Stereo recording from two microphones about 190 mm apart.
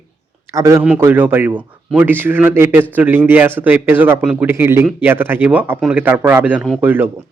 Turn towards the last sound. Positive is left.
turn(degrees=-10)  # may be behind; listen again after turning